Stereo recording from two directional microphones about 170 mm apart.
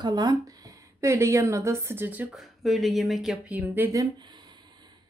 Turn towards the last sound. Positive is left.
turn(degrees=-10)  # may be behind; listen again after turning